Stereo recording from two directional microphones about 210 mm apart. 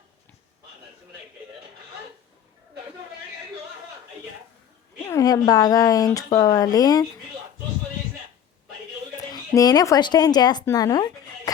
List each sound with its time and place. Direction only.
5.0 s speech: 15° left (ahead or behind)
9.3 s speech: 20° left (ahead or behind)